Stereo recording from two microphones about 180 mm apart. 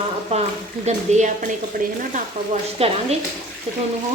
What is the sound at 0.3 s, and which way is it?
Speech, 35° right (ahead or behind).